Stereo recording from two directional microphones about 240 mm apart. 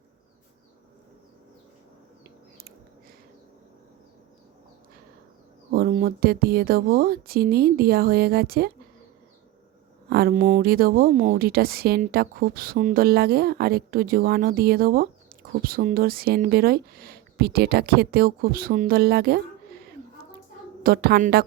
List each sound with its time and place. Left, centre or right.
5.7 s speech: right
10.1 s speech: right
20.8 s speech: right